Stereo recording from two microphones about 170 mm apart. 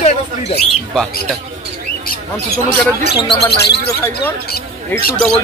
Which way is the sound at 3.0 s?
75° left (ahead or behind).